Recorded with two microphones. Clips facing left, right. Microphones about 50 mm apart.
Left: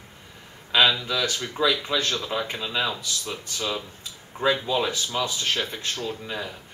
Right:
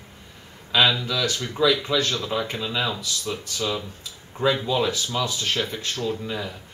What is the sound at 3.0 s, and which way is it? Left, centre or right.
Speech, left.